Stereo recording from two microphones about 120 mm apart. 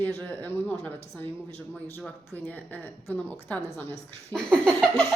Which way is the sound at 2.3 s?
15° left (ahead or behind).